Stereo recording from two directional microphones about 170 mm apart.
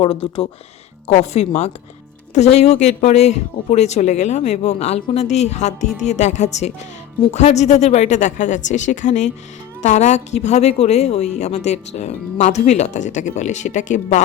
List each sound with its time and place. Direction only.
0.0 s a woman's voice: 35° left (ahead or behind)